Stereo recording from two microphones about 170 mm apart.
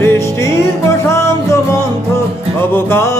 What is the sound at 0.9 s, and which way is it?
Music, 15° left (ahead or behind).